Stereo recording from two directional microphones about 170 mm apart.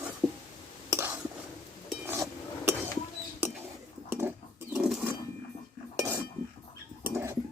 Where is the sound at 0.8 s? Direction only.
15° right (ahead or behind).